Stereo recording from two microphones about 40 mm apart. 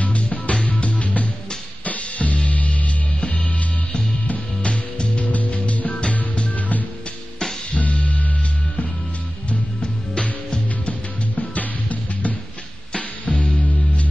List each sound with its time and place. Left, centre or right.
0.0 s music: left
5.2 s music: left
9.5 s music: left